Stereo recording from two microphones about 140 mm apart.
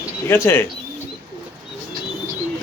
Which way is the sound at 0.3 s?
15° left (ahead or behind).